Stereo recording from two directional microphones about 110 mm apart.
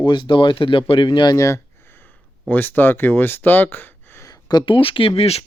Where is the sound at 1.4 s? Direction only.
25° left (ahead or behind).